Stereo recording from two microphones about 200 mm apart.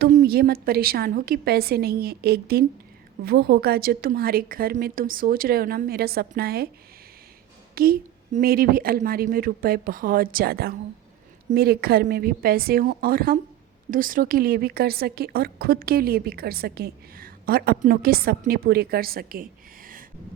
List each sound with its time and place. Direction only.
0.0 s a woman's voice: 50° right (ahead or behind)
7.8 s a woman's voice: 50° right (ahead or behind)